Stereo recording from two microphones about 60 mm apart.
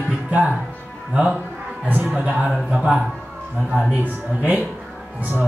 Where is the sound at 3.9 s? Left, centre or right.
Right.